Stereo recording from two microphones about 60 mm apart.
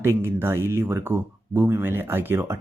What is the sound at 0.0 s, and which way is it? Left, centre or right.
Speech, right.